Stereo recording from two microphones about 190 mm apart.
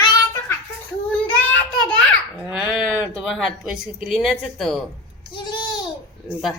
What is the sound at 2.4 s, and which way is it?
A woman's voice, 5° right (ahead or behind).